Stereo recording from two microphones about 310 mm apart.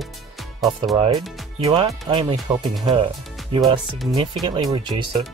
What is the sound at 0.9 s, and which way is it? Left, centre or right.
Speech, centre.